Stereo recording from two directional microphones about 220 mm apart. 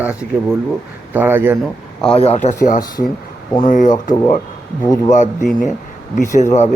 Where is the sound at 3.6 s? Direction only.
35° left (ahead or behind).